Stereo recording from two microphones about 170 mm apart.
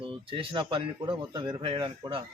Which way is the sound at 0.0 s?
30° right (ahead or behind).